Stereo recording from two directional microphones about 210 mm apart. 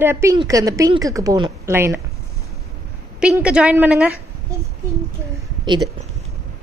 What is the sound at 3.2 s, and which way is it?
Speech, 5° right (ahead or behind).